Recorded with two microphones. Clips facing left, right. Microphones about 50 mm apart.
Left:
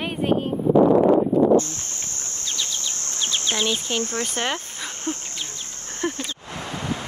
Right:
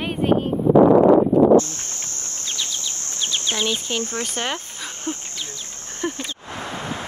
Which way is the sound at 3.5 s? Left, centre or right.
Centre.